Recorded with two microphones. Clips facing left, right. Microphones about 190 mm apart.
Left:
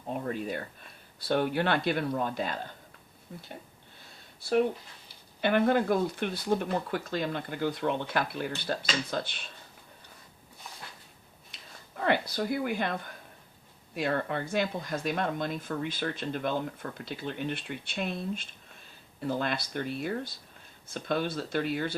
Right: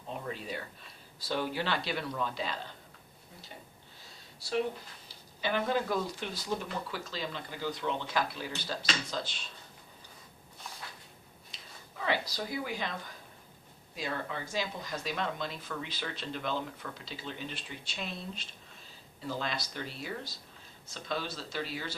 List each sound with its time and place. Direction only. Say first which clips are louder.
0.1 s speech: left 6 dB; 50° left (ahead or behind)
4.4 s speech: left 6 dB; 55° left (ahead or behind)
11.5 s speech: left 4 dB; 55° left (ahead or behind)